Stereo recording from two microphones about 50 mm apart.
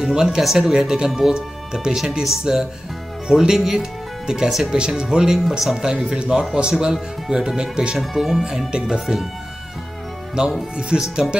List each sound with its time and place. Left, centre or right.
0.0 s speech: centre
4.7 s speech: centre
10.4 s speech: centre